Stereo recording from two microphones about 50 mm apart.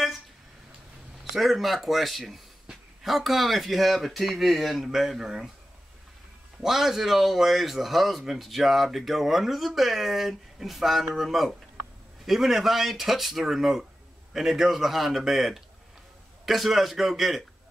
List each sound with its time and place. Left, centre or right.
1.3 s speech: centre
6.6 s speech: centre